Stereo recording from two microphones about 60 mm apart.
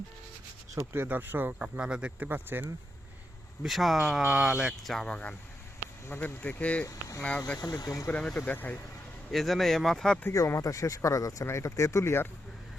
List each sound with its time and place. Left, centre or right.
1.0 s speech: right
1.5 s speech: centre
3.6 s speech: centre
4.8 s speech: centre
5.0 s speech: centre
6.8 s speech: left
7.2 s speech: left
7.7 s speech: left
8.4 s speech: left
9.3 s speech: centre
10.3 s speech: left
11.4 s speech: left